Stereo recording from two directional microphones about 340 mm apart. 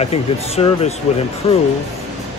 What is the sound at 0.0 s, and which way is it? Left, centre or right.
Speech, centre.